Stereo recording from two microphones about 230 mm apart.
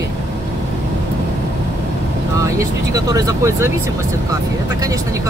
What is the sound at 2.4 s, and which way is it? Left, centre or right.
Speech, centre.